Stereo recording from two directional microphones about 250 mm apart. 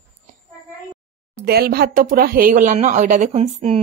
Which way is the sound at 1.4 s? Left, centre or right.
Right.